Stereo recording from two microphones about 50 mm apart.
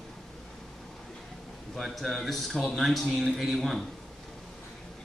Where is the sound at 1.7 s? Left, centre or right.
Centre.